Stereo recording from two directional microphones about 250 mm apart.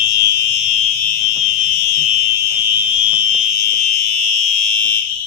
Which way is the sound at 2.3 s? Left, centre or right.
Centre.